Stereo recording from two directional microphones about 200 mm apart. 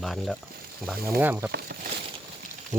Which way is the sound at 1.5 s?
55° right (ahead or behind).